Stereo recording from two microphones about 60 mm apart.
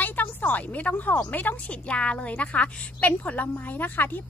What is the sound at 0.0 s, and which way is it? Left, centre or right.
A woman's voice, left.